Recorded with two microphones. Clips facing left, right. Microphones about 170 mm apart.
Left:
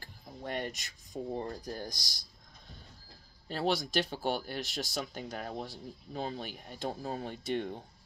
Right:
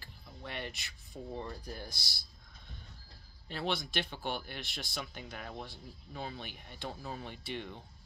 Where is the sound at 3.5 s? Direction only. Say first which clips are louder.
Left 5 dB; 40° left (ahead or behind).